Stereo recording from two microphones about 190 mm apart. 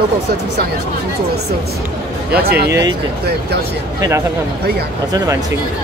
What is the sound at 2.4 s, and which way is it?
Speech, 55° right (ahead or behind).